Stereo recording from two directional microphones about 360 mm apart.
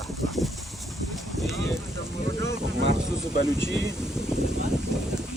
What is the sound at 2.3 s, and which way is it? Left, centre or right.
Boat, right.